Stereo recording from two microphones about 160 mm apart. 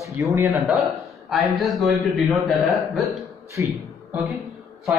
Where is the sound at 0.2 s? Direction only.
15° right (ahead or behind).